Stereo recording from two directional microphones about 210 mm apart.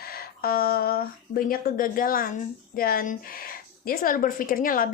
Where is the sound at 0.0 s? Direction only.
45° left (ahead or behind).